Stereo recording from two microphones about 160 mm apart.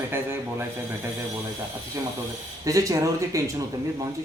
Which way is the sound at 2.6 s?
20° right (ahead or behind).